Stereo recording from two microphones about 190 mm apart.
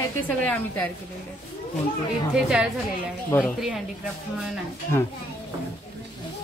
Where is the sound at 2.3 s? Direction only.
5° right (ahead or behind).